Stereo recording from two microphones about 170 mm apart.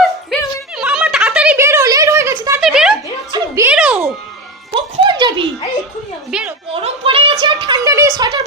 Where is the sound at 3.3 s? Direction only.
25° right (ahead or behind).